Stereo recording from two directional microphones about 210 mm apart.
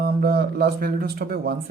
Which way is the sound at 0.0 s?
45° right (ahead or behind).